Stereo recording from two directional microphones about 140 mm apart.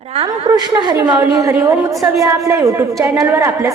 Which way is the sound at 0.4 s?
30° right (ahead or behind).